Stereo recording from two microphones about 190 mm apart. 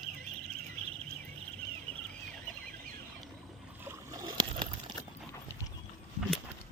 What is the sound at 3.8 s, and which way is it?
Boat, 20° right (ahead or behind).